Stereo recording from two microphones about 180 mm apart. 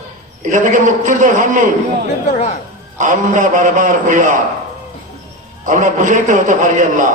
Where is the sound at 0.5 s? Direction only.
45° right (ahead or behind).